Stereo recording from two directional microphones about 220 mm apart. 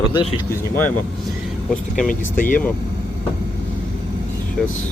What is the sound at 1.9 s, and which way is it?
Speech, 35° left (ahead or behind).